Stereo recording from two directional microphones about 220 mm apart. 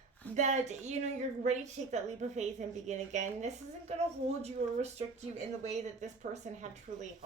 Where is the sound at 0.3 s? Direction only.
30° right (ahead or behind).